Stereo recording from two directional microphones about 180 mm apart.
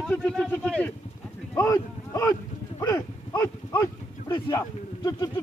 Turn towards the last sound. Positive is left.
turn(degrees=20)  # may be behind; listen again after turning